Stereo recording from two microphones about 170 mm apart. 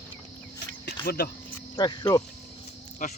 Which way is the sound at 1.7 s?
25° left (ahead or behind).